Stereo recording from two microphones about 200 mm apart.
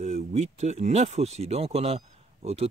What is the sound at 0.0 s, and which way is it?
Speech, 35° right (ahead or behind).